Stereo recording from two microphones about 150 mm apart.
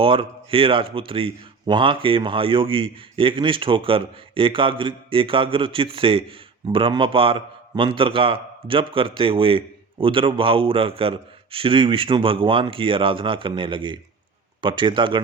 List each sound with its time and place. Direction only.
0.0 s speech: 35° right (ahead or behind)